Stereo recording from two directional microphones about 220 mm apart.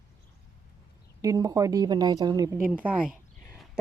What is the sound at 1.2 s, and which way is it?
Speech, 15° right (ahead or behind).